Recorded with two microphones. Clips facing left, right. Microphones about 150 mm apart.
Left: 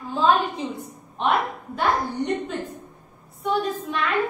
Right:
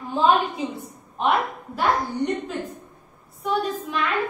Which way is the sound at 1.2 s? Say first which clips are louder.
Right 1 dB; centre (ahead or behind).